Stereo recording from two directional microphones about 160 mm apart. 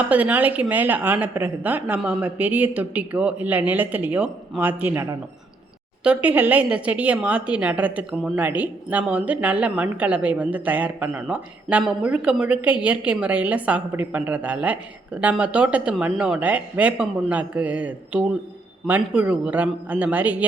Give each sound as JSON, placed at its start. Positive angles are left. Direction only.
{"t": 0.0, "sound": "a woman's voice", "side_deg": -10}
{"t": 6.2, "sound": "a woman's voice", "side_deg": -10}